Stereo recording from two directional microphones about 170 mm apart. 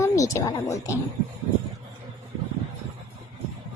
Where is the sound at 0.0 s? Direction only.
20° left (ahead or behind).